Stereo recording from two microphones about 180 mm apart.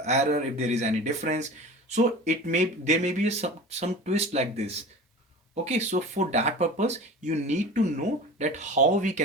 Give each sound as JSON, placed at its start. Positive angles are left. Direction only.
{"t": 0.0, "sound": "speech", "side_deg": -40}